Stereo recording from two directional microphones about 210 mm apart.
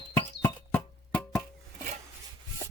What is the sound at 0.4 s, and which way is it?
Music, 5° left (ahead or behind).